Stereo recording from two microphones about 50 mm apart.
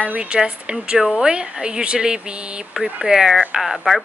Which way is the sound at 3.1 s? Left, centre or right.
Centre.